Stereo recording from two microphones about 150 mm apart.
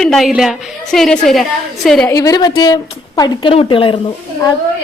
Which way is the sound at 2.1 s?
25° left (ahead or behind).